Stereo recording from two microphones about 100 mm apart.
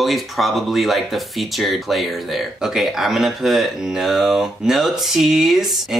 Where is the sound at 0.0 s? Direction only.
Centre (ahead or behind).